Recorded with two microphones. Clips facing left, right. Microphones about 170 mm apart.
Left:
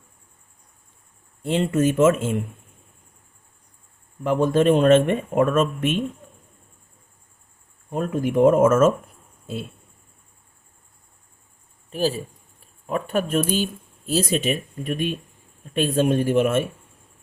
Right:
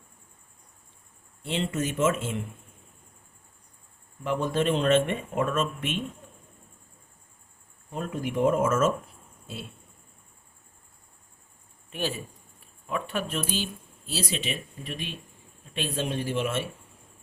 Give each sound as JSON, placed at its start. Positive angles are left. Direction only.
{"t": 1.4, "sound": "speech", "side_deg": 50}
{"t": 4.2, "sound": "speech", "side_deg": 50}
{"t": 7.9, "sound": "speech", "side_deg": 50}
{"t": 11.9, "sound": "speech", "side_deg": 35}